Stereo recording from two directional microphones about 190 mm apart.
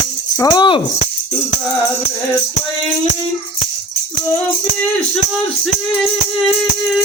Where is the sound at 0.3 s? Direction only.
20° left (ahead or behind).